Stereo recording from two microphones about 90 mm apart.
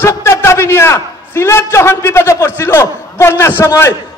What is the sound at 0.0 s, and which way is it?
A man's voice, 30° left (ahead or behind).